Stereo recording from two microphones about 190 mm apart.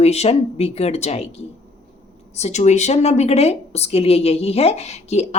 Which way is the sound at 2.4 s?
35° left (ahead or behind).